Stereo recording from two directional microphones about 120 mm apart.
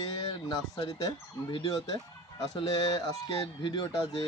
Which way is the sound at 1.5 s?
30° left (ahead or behind).